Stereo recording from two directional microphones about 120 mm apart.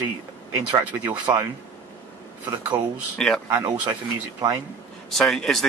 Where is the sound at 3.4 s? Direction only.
30° right (ahead or behind).